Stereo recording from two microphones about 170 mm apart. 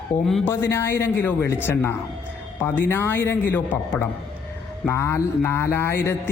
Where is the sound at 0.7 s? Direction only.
15° left (ahead or behind).